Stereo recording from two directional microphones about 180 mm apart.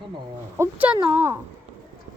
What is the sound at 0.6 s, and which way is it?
Speech, 10° right (ahead or behind).